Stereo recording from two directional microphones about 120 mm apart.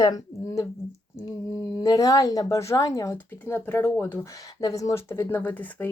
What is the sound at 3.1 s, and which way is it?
Speech, 15° left (ahead or behind).